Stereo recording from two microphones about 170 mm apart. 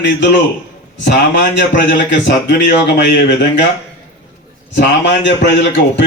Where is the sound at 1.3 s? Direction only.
90° left.